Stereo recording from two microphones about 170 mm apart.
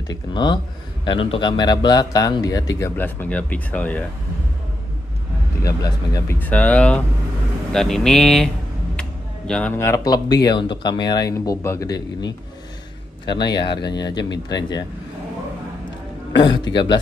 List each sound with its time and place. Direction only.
0.0 s a man's voice: 25° left (ahead or behind); by 4.0 s 10° left (ahead or behind)
5.6 s speech: 20° left (ahead or behind); by 8.5 s centre (ahead or behind)
9.5 s a man's voice: 10° left (ahead or behind); by 14.9 s 25° left (ahead or behind)
16.3 s a man's voice: 25° left (ahead or behind)